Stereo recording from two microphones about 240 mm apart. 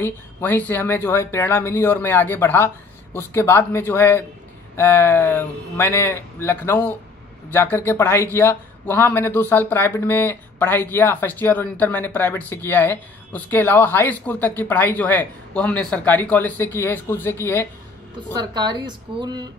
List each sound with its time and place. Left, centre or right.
0.0 s a man's voice: centre
18.3 s speech: centre